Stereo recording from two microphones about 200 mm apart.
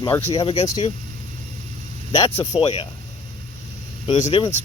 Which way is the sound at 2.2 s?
20° left (ahead or behind).